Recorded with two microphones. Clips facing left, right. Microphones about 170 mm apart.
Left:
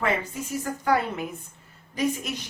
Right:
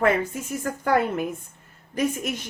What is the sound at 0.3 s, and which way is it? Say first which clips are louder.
Speech: right 1 dB; 50° right (ahead or behind).